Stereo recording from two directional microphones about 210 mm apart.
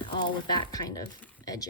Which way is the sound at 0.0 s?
20° left (ahead or behind).